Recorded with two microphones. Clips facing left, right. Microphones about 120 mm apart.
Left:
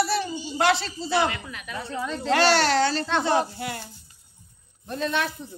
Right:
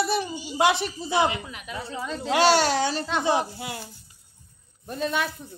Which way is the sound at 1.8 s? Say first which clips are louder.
Left 2 dB; 5° right (ahead or behind).